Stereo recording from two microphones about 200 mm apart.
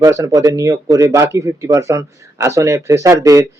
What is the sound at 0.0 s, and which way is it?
Speech, 15° right (ahead or behind).